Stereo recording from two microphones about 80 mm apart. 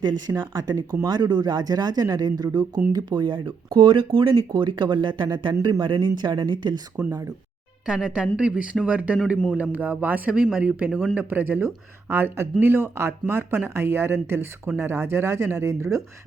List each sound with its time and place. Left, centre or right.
0.0 s speech: right
7.9 s speech: centre; by 16.0 s right